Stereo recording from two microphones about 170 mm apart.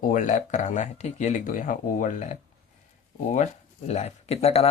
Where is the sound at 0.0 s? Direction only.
50° left (ahead or behind).